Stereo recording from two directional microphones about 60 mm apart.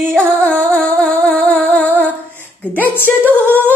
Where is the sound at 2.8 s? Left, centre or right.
Left.